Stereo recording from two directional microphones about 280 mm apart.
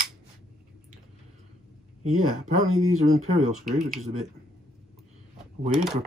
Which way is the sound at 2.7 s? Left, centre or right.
Right.